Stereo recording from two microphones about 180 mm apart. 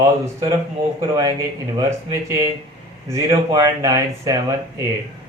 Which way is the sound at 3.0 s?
15° right (ahead or behind).